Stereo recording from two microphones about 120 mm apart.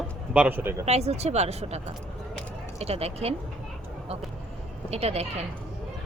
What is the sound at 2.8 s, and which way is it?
Speech, 60° right (ahead or behind).